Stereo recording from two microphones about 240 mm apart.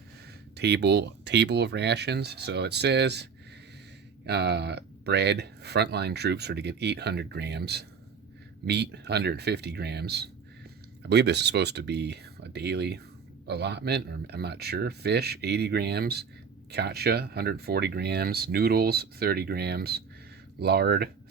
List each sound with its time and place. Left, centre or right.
0.5 s speech: right
4.3 s speech: right